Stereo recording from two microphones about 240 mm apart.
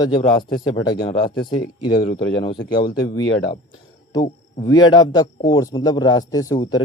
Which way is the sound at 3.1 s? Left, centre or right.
Left.